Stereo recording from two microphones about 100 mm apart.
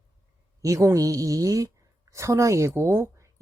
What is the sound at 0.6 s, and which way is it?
A woman's voice, 35° right (ahead or behind).